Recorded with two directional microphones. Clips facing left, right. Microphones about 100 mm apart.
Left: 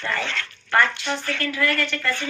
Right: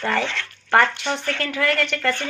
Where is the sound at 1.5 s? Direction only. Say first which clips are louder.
Right 3 dB; 55° right (ahead or behind).